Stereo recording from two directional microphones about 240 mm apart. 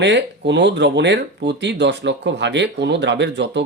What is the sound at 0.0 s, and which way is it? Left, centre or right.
Speech, right.